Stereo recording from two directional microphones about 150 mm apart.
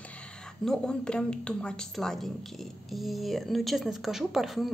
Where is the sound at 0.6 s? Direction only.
5° left (ahead or behind).